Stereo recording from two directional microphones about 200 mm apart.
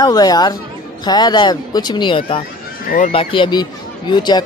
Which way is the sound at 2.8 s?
40° left (ahead or behind).